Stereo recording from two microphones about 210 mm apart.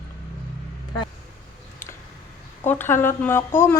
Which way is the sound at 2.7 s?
10° left (ahead or behind).